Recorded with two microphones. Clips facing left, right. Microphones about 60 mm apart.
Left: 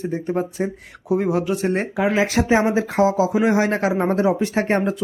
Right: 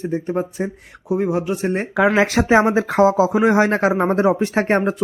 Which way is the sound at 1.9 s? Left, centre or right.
Right.